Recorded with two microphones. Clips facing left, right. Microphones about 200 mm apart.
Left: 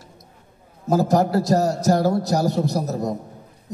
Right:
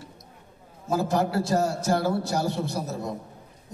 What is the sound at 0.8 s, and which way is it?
A man's voice, 40° left (ahead or behind).